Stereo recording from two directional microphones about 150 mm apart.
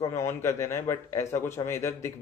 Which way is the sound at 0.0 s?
20° left (ahead or behind).